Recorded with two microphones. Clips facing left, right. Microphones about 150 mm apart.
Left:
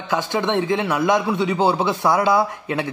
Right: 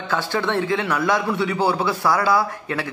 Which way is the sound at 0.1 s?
15° left (ahead or behind).